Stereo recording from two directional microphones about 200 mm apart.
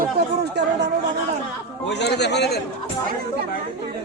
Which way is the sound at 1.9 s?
60° left (ahead or behind).